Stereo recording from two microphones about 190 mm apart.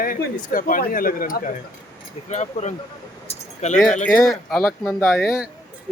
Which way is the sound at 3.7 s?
Centre (ahead or behind).